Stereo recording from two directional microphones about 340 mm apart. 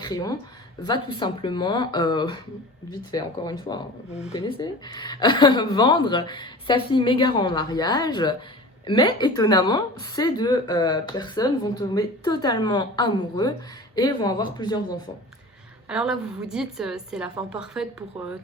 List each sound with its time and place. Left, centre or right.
0.0 s a woman's voice: centre
15.9 s a woman's voice: centre